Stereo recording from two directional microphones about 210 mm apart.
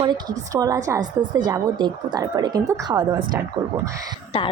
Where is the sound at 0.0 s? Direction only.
20° right (ahead or behind).